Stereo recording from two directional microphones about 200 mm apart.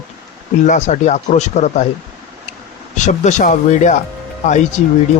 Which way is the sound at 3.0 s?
35° left (ahead or behind).